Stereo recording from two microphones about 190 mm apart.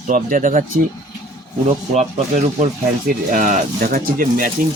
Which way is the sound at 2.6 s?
45° right (ahead or behind).